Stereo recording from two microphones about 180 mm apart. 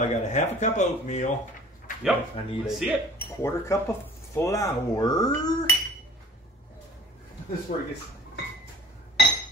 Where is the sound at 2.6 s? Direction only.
Centre (ahead or behind).